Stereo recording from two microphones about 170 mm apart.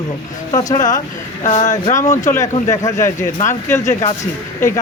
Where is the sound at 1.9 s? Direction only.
20° left (ahead or behind).